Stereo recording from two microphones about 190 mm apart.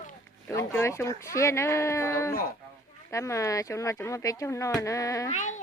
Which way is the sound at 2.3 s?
50° left (ahead or behind).